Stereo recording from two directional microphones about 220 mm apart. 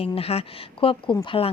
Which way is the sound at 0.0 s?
25° left (ahead or behind).